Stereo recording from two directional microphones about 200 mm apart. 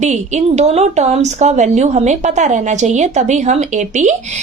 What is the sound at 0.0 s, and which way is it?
A woman's voice, 35° right (ahead or behind).